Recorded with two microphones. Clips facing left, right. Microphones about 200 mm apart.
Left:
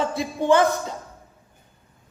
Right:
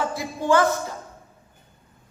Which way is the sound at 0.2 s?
20° left (ahead or behind).